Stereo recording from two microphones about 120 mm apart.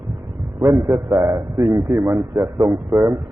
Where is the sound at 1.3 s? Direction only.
45° right (ahead or behind).